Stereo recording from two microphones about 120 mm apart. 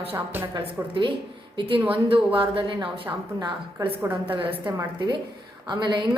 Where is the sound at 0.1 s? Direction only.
15° right (ahead or behind).